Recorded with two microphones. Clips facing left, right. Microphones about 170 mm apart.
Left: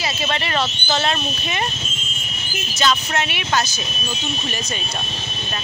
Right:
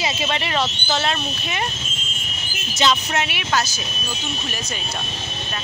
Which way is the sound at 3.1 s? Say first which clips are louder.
Left 1 dB; 5° right (ahead or behind).